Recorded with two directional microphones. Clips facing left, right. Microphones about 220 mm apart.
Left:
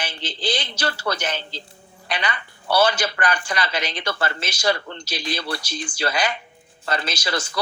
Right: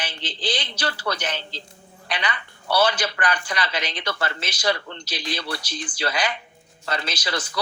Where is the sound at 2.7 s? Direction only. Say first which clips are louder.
Left 2 dB; 45° left (ahead or behind).